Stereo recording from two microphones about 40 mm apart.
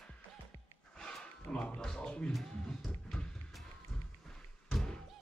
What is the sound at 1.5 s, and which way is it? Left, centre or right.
Speech, left.